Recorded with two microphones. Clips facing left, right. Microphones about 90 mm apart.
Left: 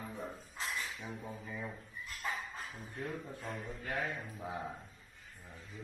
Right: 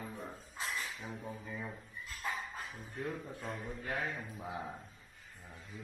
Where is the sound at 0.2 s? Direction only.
Centre (ahead or behind).